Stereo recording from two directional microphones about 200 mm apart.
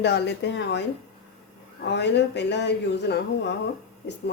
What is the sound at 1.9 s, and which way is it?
Speech, 60° left (ahead or behind).